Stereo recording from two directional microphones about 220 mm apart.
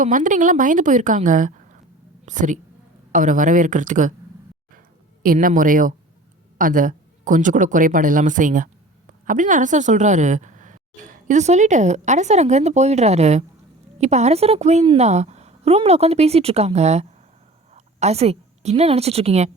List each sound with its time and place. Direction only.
0.0 s a woman's voice: 35° right (ahead or behind)
5.2 s a woman's voice: 40° right (ahead or behind)